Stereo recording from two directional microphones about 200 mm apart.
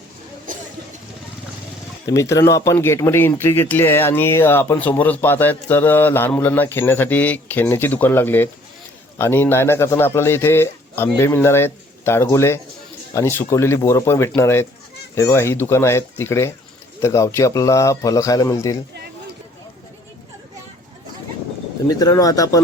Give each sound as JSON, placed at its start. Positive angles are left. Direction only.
{"t": 2.0, "sound": "speech", "side_deg": 15}
{"t": 21.8, "sound": "speech", "side_deg": 20}